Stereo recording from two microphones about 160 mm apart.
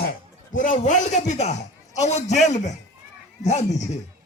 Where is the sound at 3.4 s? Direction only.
45° left (ahead or behind).